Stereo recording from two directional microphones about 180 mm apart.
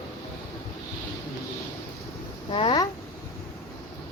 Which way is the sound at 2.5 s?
30° left (ahead or behind).